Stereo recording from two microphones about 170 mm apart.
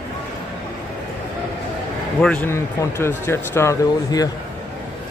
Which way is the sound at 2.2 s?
10° left (ahead or behind).